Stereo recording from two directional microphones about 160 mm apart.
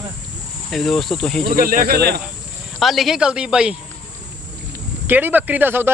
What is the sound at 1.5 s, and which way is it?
Speech, 60° right (ahead or behind).